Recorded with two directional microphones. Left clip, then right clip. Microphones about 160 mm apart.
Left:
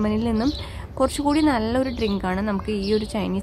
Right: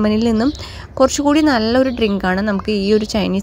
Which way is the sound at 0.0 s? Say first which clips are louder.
Right 7 dB; 35° right (ahead or behind).